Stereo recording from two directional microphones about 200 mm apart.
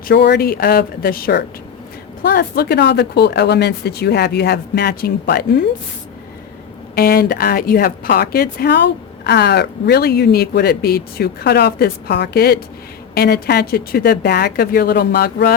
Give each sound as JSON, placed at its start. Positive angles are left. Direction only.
{"t": 0.1, "sound": "a woman's voice", "side_deg": 55}
{"t": 6.9, "sound": "a woman's voice", "side_deg": 50}